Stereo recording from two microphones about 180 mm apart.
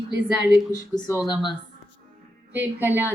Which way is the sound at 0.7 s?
20° left (ahead or behind).